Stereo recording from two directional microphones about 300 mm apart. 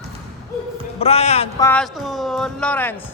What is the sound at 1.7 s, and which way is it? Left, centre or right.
Speech, centre.